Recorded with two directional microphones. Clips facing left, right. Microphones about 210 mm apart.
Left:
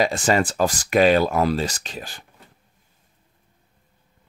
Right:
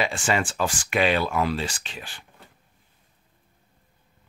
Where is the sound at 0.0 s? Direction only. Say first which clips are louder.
Left 5 dB; 40° left (ahead or behind).